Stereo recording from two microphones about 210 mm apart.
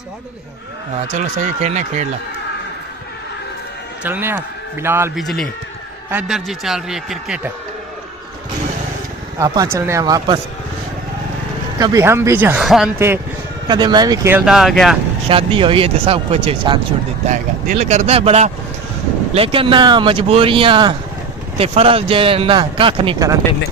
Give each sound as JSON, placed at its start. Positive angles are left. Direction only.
{"t": 1.1, "sound": "speech", "side_deg": -35}
{"t": 4.0, "sound": "speech", "side_deg": -10}
{"t": 5.1, "sound": "a man's voice", "side_deg": 0}
{"t": 9.4, "sound": "speech", "side_deg": -15}
{"t": 11.8, "sound": "speech", "side_deg": -15}
{"t": 13.7, "sound": "speech", "side_deg": -20}
{"t": 14.3, "sound": "a man's voice", "side_deg": 0}
{"t": 15.2, "sound": "speech", "side_deg": -25}